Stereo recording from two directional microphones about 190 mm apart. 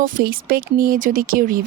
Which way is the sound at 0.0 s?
50° right (ahead or behind).